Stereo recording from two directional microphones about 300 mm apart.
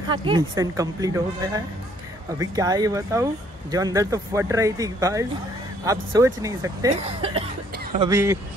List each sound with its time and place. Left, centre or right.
0.1 s speech: centre
7.7 s a sound: right
8.0 s speech: centre